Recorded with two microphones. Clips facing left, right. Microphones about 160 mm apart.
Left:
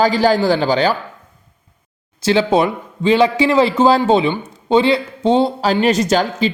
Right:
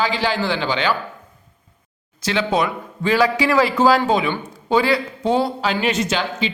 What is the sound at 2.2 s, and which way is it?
A man's voice, 30° left (ahead or behind).